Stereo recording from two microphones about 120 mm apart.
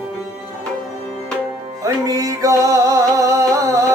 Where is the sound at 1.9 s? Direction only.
30° right (ahead or behind).